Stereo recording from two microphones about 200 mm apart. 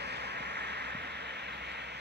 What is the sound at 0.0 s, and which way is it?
Vehicle, 55° right (ahead or behind).